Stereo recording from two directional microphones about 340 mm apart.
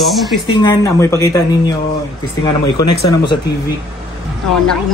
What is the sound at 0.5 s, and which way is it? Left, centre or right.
Speech, centre.